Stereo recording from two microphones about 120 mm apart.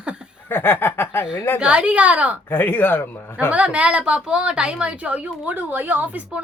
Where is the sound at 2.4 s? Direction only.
15° left (ahead or behind).